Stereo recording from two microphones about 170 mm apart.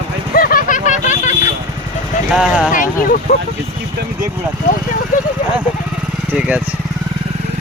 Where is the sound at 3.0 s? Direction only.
55° left (ahead or behind).